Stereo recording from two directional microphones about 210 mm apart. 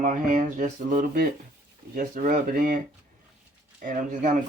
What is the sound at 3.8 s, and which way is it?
Speech, 40° right (ahead or behind).